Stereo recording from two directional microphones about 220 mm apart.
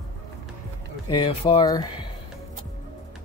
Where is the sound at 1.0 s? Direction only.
20° left (ahead or behind).